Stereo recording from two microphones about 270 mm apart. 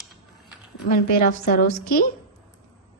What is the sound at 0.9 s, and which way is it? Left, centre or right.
A woman's voice, left.